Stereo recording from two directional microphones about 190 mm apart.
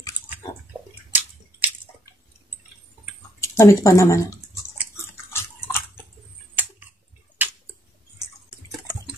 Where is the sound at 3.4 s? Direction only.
15° left (ahead or behind).